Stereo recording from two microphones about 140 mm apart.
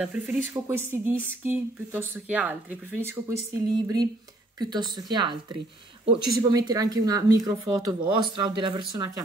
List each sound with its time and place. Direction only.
0.0 s a woman's voice: 10° right (ahead or behind); by 9.1 s 30° right (ahead or behind)